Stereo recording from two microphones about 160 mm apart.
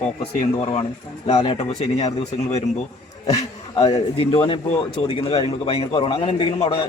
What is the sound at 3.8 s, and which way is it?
Speech, 35° left (ahead or behind).